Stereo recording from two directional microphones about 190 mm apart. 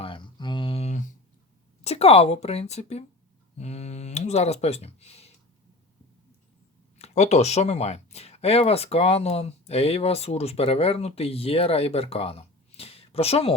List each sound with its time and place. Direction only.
0.0 s a sound: 25° left (ahead or behind)
1.8 s speech: 35° left (ahead or behind)
7.0 s speech: 35° left (ahead or behind)